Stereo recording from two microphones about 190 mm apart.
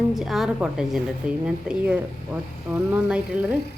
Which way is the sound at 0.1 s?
Centre (ahead or behind).